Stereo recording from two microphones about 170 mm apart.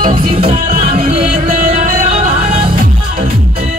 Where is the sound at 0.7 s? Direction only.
45° right (ahead or behind).